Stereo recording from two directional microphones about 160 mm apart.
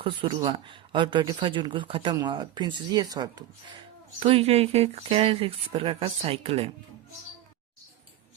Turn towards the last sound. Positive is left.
turn(degrees=-35)  # may be behind; listen again after turning